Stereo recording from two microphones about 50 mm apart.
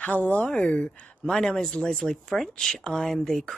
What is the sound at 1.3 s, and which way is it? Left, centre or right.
Speech, centre.